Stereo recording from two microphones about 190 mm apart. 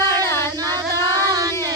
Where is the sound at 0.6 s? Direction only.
20° right (ahead or behind).